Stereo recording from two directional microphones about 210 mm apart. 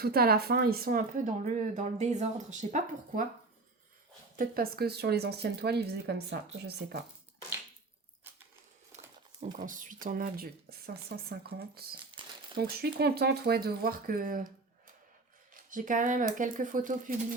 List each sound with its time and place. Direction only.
0.0 s speech: 45° right (ahead or behind)
4.4 s speech: 45° right (ahead or behind)
9.6 s speech: 40° right (ahead or behind)
15.5 s speech: 40° right (ahead or behind)